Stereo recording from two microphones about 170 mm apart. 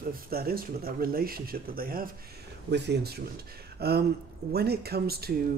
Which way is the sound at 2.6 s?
80° right.